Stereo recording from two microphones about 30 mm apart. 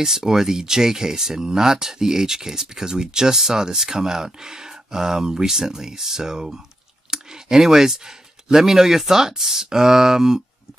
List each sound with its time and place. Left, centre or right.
0.0 s speech: centre